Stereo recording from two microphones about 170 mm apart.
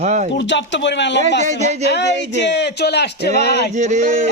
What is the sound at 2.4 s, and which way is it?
Speech, 85° left.